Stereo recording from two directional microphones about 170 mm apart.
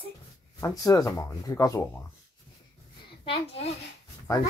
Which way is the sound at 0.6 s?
20° left (ahead or behind).